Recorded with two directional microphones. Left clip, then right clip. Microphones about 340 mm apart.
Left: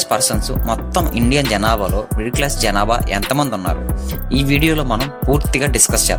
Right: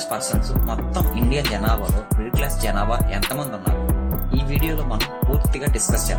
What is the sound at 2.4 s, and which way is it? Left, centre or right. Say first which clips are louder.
Speech: left 9 dB; left.